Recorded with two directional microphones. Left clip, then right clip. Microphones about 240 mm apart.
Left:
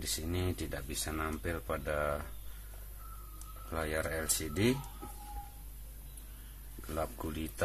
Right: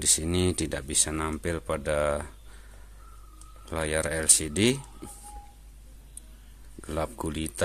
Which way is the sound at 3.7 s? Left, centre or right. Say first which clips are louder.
Right 7 dB; right.